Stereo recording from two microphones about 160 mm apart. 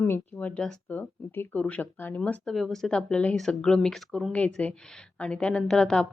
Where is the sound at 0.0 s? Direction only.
10° left (ahead or behind).